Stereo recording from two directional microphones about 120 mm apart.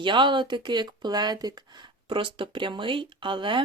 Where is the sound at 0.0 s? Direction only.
45° right (ahead or behind).